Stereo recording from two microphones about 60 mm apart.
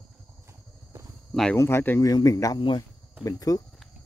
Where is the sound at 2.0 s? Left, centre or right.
Left.